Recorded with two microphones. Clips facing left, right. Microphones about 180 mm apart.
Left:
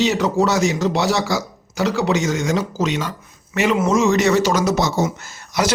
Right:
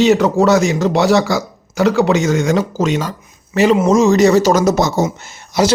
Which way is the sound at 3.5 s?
35° right (ahead or behind).